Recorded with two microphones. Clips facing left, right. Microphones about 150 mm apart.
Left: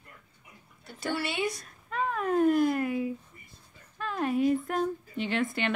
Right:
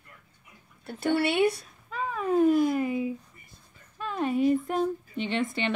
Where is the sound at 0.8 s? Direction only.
55° right (ahead or behind).